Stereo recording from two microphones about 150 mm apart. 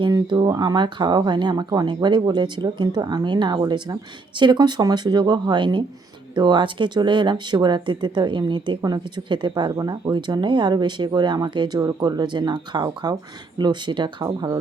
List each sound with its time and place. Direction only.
0.0 s speech: 30° right (ahead or behind)